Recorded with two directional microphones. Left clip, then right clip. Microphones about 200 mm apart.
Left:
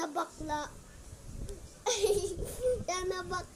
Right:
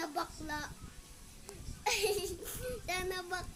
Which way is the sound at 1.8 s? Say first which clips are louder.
Left 3 dB; 10° right (ahead or behind).